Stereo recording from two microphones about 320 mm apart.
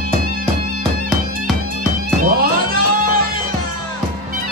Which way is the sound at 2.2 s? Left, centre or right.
Right.